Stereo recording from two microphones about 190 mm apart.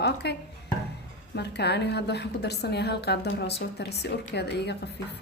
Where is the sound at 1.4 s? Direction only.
60° left (ahead or behind).